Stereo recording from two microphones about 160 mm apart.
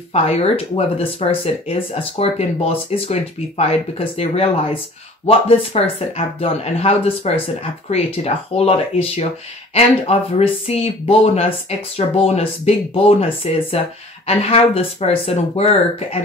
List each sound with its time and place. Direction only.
0.1 s speech: 40° left (ahead or behind)